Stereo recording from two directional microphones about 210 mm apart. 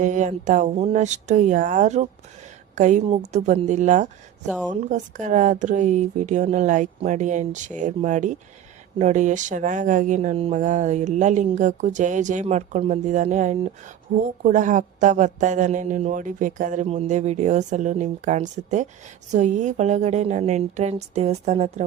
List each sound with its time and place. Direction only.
0.0 s speech: 35° right (ahead or behind)